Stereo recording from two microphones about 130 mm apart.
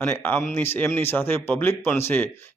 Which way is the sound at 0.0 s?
15° left (ahead or behind).